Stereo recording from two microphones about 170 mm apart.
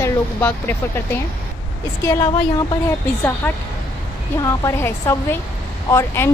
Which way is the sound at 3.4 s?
15° left (ahead or behind).